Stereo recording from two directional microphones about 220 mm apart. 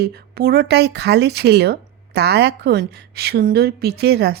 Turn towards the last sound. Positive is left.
turn(degrees=-45)  # may be behind; listen again after turning